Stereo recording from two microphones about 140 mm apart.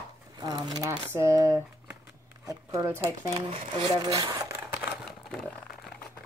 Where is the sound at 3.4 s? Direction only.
40° right (ahead or behind).